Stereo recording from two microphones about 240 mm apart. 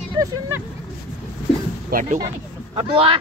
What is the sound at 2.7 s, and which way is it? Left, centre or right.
Speech, right.